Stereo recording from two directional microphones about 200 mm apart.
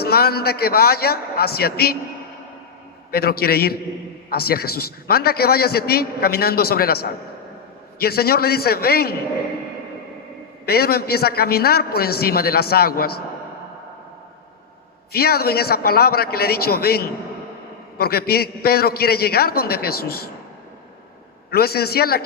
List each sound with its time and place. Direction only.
0.0 s a man's voice: 50° left (ahead or behind)
3.1 s a man's voice: 50° left (ahead or behind)
10.7 s a man's voice: 50° left (ahead or behind)
15.1 s a man's voice: 50° left (ahead or behind)
21.5 s a man's voice: 50° left (ahead or behind)